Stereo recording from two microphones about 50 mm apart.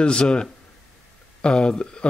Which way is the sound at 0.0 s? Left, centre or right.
Centre.